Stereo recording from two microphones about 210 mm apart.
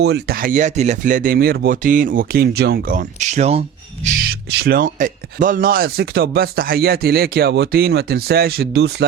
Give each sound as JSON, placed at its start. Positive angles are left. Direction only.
{"t": 0.0, "sound": "speech", "side_deg": -50}
{"t": 4.0, "sound": "speech", "side_deg": -40}